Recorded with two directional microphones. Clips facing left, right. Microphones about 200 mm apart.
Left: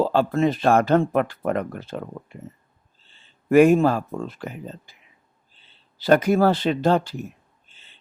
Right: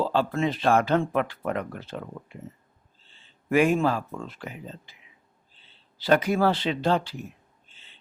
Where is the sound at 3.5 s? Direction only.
45° left (ahead or behind).